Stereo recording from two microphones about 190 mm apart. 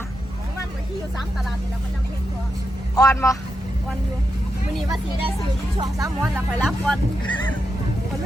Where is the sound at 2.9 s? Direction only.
15° left (ahead or behind).